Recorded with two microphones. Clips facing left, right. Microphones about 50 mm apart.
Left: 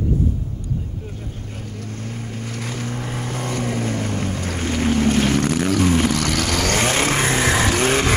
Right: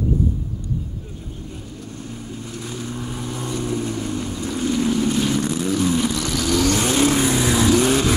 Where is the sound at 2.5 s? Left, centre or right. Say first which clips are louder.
Left 2 dB; left.